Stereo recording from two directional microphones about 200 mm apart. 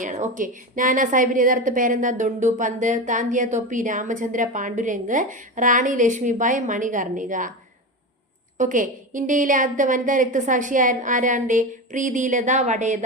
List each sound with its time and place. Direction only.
0.0 s a woman's voice: 40° right (ahead or behind)
8.5 s a woman's voice: 40° right (ahead or behind)